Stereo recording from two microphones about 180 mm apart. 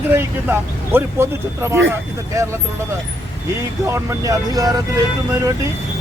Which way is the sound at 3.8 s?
15° right (ahead or behind).